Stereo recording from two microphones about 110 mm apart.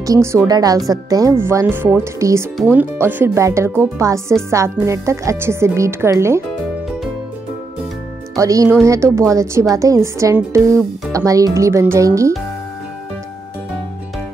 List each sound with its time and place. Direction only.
0.0 s speech: 30° right (ahead or behind)
8.4 s speech: 30° right (ahead or behind)